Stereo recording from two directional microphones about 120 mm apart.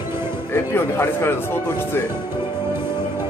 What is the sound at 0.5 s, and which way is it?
Speech, 20° left (ahead or behind).